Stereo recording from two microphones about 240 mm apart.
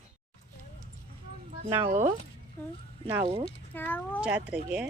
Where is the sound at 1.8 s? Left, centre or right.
Right.